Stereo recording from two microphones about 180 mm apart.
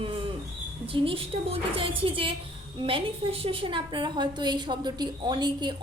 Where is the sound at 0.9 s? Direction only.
30° right (ahead or behind).